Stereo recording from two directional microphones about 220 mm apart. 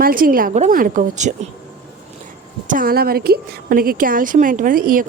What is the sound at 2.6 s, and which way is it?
A woman's voice, 40° right (ahead or behind).